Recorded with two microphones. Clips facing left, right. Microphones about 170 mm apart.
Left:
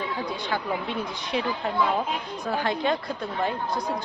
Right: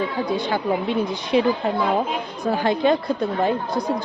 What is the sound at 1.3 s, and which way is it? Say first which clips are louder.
Speech: right 9 dB; 20° right (ahead or behind).